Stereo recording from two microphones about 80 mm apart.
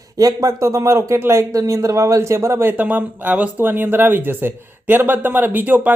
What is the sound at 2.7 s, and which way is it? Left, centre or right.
Speech, right.